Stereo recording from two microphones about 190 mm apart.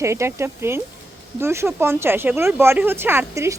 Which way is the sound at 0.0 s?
15° right (ahead or behind).